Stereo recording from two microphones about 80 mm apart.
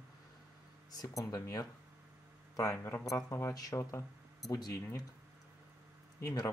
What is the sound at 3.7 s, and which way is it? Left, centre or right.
Speech, left.